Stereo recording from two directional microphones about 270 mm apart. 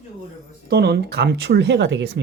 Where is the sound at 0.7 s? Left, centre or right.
Right.